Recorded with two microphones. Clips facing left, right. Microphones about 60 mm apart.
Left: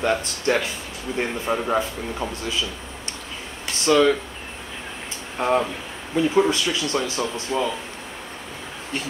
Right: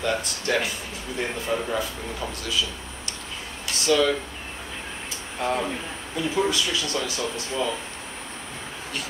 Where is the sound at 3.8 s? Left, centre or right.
Left.